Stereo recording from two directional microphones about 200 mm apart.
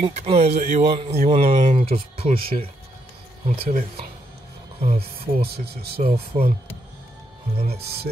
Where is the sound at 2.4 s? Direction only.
45° right (ahead or behind).